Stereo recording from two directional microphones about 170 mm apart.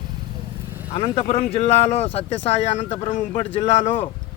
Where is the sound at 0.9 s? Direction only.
35° left (ahead or behind).